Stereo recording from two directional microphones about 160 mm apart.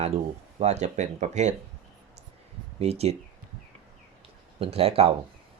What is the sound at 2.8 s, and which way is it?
Speech, 40° right (ahead or behind).